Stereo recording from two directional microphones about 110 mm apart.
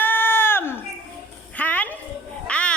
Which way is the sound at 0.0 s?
20° left (ahead or behind).